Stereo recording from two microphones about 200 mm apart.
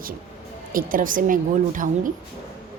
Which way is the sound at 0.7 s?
45° right (ahead or behind).